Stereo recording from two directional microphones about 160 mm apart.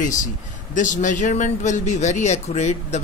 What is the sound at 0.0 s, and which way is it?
Speech, 50° left (ahead or behind).